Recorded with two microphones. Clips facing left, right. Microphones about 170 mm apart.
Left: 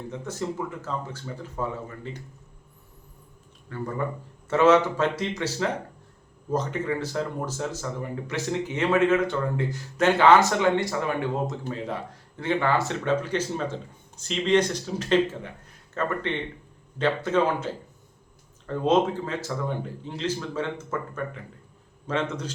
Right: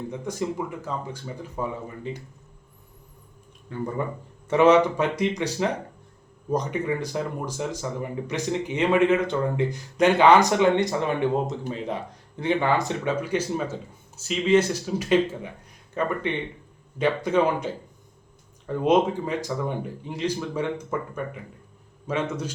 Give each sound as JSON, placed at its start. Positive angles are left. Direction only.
{"t": 0.1, "sound": "speech", "side_deg": -15}
{"t": 3.7, "sound": "speech", "side_deg": -20}